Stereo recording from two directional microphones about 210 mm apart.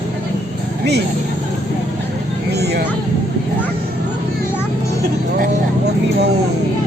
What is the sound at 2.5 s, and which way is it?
Speech, 50° right (ahead or behind).